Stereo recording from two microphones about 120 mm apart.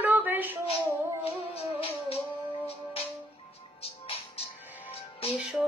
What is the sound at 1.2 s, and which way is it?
Music, 55° left (ahead or behind).